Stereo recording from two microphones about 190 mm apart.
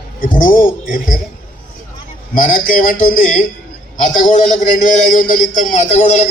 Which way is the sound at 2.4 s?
45° left (ahead or behind).